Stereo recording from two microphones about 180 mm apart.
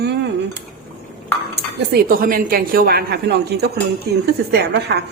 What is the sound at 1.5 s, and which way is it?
A woman's voice, 60° right (ahead or behind).